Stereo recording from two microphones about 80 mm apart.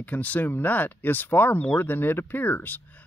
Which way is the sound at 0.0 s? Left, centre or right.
Centre.